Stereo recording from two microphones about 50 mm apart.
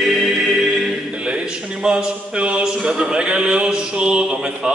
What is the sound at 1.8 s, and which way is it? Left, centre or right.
Speech, centre.